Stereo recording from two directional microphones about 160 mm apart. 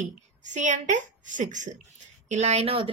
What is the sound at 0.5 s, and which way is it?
A woman's voice, 50° right (ahead or behind).